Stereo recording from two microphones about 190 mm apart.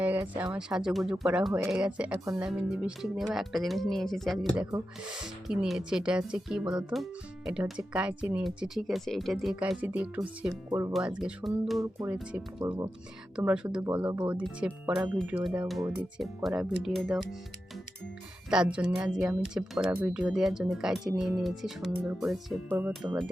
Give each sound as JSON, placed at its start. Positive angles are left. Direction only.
{"t": 0.0, "sound": "a sound", "side_deg": -10}
{"t": 0.5, "sound": "speech", "side_deg": -5}
{"t": 10.7, "sound": "speech", "side_deg": -15}
{"t": 10.9, "sound": "speech", "side_deg": -5}
{"t": 12.6, "sound": "speech", "side_deg": -25}
{"t": 13.3, "sound": "speech", "side_deg": -5}
{"t": 18.5, "sound": "speech", "side_deg": -5}
{"t": 23.0, "sound": "speech", "side_deg": -15}